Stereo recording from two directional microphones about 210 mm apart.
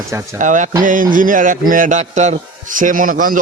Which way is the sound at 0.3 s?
35° right (ahead or behind).